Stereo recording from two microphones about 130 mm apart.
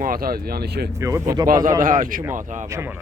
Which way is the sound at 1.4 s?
90° right.